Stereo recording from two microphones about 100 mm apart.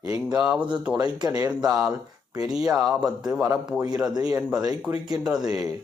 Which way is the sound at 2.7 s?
5° right (ahead or behind).